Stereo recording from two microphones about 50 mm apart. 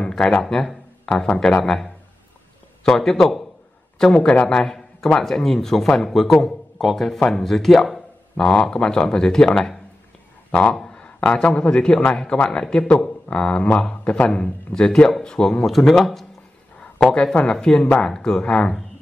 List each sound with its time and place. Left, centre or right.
0.4 s a man's voice: centre
1.6 s a man's voice: centre
8.4 s a man's voice: centre
14.7 s speech: centre
15.6 s speech: centre
17.1 s speech: centre